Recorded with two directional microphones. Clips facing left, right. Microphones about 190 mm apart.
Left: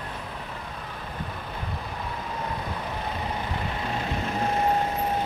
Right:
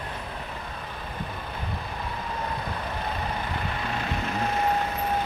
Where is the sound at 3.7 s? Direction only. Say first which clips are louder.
Left 1 dB; 30° left (ahead or behind).